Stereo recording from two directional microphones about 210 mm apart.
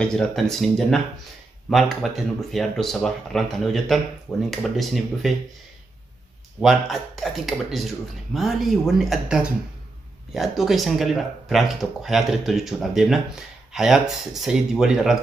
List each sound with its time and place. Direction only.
0.0 s speech: 5° left (ahead or behind)
6.6 s speech: centre (ahead or behind)